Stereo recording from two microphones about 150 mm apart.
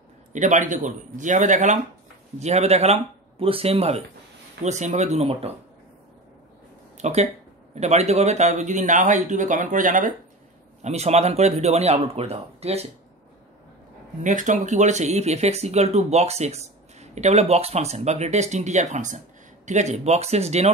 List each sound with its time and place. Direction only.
0.3 s speech: 55° right (ahead or behind)
7.0 s speech: 45° right (ahead or behind)
10.8 s speech: 45° right (ahead or behind)
14.2 s speech: 55° right (ahead or behind)